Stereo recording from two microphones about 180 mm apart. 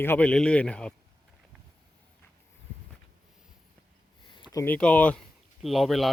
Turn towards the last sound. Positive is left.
turn(degrees=0)  # may be behind; listen again after turning